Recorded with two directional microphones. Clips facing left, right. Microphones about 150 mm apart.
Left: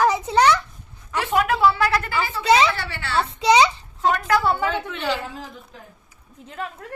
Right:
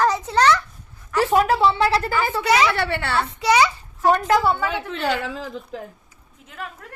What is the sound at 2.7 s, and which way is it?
Speech, 60° right (ahead or behind).